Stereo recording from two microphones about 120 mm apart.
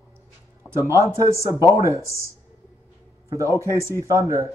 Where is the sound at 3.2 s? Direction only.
25° right (ahead or behind).